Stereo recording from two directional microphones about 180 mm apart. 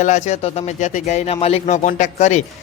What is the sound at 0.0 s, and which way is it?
Speech, 40° left (ahead or behind).